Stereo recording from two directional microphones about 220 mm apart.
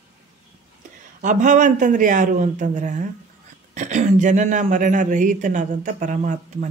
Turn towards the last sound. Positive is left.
turn(degrees=-35)  # may be behind; listen again after turning